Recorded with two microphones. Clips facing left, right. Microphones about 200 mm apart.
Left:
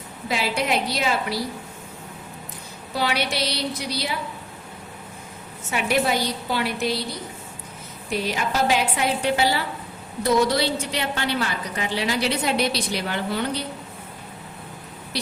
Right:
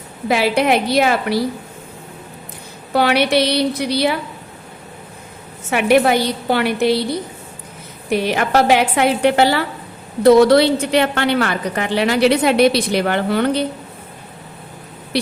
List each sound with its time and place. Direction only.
0.3 s a woman's voice: 65° right (ahead or behind)
2.9 s a woman's voice: 65° right (ahead or behind)
5.7 s a woman's voice: 65° right (ahead or behind)
15.1 s a sound: 65° right (ahead or behind)